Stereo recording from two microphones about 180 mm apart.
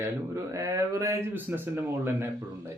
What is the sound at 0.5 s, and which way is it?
Speech, 20° right (ahead or behind).